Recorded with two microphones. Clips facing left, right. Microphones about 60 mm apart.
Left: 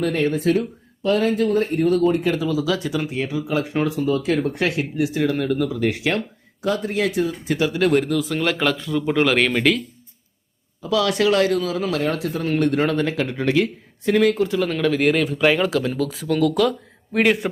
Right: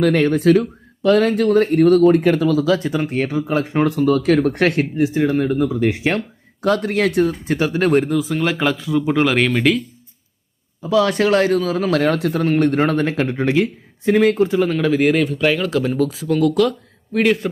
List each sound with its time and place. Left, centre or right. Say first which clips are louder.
0.0 s speech: right 5 dB; right
1.0 s speech: right 5 dB; right
1.5 s speech: right 6 dB; right
2.6 s speech: right 5 dB; right
3.8 s speech: right 5 dB; right
4.9 s speech: right 4 dB; right
6.6 s speech: right 4 dB; right
7.4 s speech: right 2 dB; right
8.1 s speech: right 2 dB; centre
10.8 s speech: right 3 dB; right
11.9 s speech: right 5 dB; right
12.5 s speech: right 2 dB; right
13.4 s speech: even; centre
14.7 s speech: right 3 dB; centre